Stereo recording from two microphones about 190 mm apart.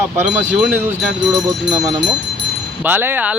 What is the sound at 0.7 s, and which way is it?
Speech, 10° right (ahead or behind).